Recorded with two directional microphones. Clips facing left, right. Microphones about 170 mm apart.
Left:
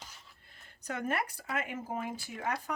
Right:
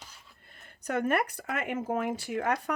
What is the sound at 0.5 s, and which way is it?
Speech, 60° right (ahead or behind).